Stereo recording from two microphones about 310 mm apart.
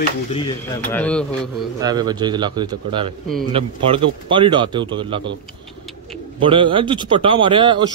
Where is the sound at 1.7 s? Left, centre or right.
Centre.